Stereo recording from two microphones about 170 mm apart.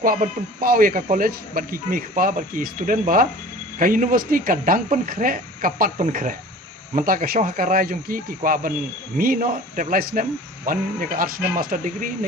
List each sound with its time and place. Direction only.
0.0 s speech: 55° right (ahead or behind)